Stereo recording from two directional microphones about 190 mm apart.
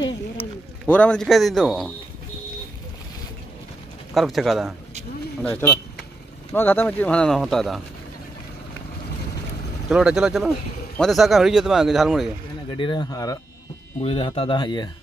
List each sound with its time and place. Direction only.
0.4 s a man's voice: 10° left (ahead or behind)
4.1 s speech: centre (ahead or behind)
5.4 s speech: 15° left (ahead or behind)
9.8 s speech: 5° right (ahead or behind)
12.6 s speech: 25° left (ahead or behind)
14.0 s speech: 30° left (ahead or behind)